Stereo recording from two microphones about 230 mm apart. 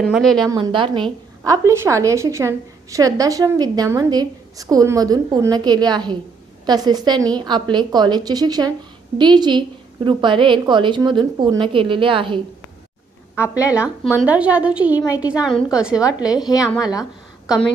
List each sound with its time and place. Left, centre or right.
0.0 s a woman's voice: centre
0.4 s a woman's voice: centre
13.7 s a woman's voice: centre